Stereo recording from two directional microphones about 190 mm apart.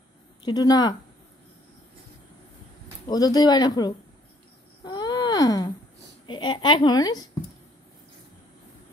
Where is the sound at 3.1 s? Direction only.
20° left (ahead or behind).